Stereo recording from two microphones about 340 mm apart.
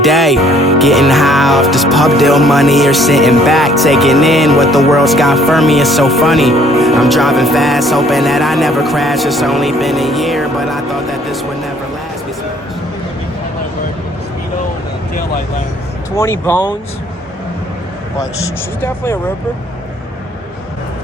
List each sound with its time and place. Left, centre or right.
0.0 s speech: centre
0.7 s music: centre
16.1 s speech: centre
18.2 s speech: centre